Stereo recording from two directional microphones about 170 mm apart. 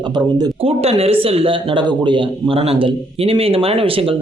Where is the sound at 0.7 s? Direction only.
35° right (ahead or behind).